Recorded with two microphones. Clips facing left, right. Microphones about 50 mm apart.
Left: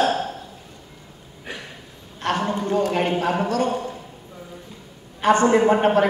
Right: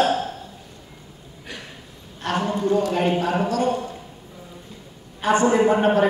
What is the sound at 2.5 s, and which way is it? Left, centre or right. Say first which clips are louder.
Speech: right 1 dB; left.